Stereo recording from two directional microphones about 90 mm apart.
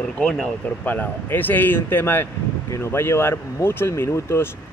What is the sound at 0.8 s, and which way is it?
Speech, 20° left (ahead or behind).